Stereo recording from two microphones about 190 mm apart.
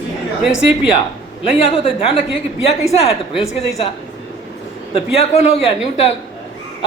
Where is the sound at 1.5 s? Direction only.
30° left (ahead or behind).